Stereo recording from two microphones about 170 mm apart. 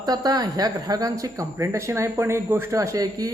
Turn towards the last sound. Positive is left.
turn(degrees=-20)  # may be behind; listen again after turning